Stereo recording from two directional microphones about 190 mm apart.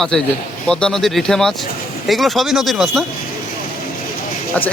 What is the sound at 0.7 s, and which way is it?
Speech, 5° left (ahead or behind).